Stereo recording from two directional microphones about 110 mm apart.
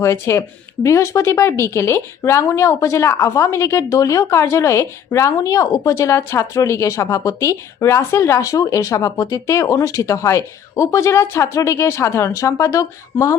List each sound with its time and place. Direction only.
0.0 s speech: 25° left (ahead or behind)